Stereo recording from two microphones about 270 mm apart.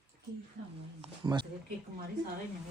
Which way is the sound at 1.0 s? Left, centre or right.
Centre.